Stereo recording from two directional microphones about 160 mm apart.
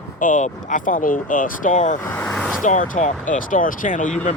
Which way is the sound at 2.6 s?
55° left (ahead or behind).